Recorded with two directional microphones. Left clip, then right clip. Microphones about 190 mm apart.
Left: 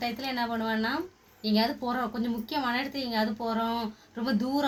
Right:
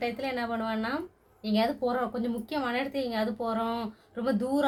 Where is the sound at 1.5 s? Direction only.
35° right (ahead or behind).